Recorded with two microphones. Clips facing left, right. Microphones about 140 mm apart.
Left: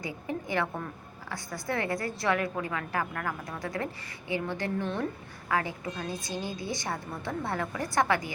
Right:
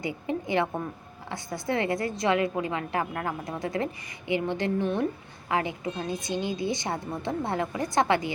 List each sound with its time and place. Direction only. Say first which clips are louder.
0.0 s a woman's voice: right 4 dB; 20° right (ahead or behind)